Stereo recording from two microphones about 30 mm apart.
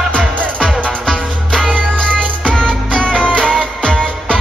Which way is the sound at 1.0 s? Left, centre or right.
Left.